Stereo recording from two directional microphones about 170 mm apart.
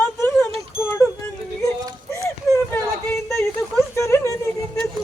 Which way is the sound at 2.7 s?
10° left (ahead or behind).